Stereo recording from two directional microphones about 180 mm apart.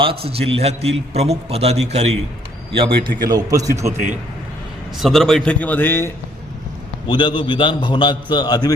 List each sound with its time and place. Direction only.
0.0 s a man's voice: 30° right (ahead or behind)
4.9 s a man's voice: centre (ahead or behind)
7.1 s a man's voice: 25° left (ahead or behind)